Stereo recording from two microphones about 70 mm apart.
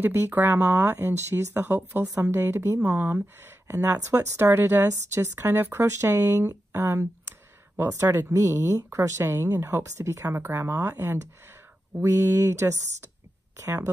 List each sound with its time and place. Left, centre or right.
0.0 s speech: right
2.9 s speech: right
4.8 s speech: right
10.3 s speech: right
10.9 s speech: right